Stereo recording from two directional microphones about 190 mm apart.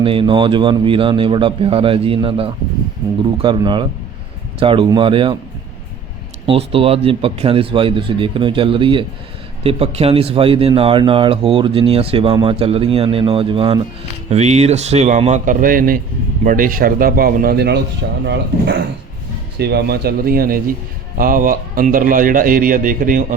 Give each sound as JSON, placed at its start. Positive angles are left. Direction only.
{"t": 0.0, "sound": "speech", "side_deg": -25}
{"t": 6.4, "sound": "a man's voice", "side_deg": -30}
{"t": 18.3, "sound": "a man's voice", "side_deg": -65}